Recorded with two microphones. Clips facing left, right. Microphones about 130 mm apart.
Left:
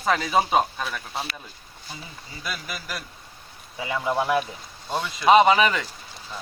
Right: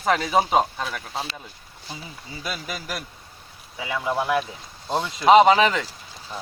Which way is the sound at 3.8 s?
Centre (ahead or behind).